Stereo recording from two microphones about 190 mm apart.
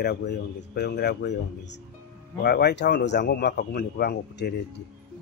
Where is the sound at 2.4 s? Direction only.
55° left (ahead or behind).